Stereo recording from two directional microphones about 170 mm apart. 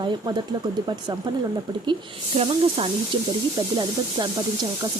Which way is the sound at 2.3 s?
30° right (ahead or behind).